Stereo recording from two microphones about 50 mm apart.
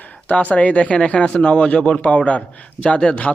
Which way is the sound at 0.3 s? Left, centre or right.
Left.